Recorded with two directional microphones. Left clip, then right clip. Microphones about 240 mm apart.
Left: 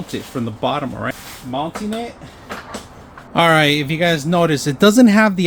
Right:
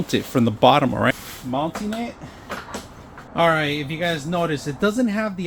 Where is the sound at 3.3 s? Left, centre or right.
Left.